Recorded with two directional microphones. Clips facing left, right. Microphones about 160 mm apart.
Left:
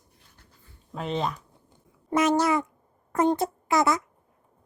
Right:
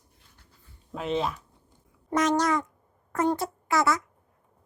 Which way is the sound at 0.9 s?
Centre (ahead or behind).